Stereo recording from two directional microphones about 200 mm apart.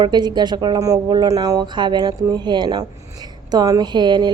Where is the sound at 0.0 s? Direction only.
20° right (ahead or behind).